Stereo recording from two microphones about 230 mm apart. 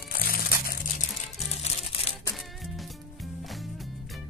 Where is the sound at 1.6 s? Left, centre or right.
Left.